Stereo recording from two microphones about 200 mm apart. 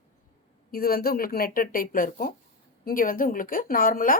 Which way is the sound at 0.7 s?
50° left (ahead or behind).